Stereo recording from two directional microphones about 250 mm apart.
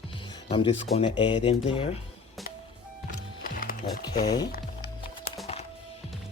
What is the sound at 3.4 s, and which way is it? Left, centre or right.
Music, left.